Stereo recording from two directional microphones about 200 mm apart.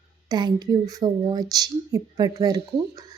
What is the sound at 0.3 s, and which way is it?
A woman's voice, 20° right (ahead or behind).